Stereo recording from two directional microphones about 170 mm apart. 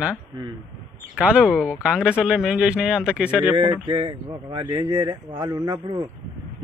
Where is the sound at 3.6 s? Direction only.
30° right (ahead or behind).